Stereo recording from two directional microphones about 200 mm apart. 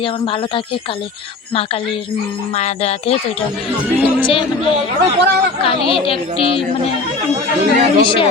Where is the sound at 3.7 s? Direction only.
10° right (ahead or behind).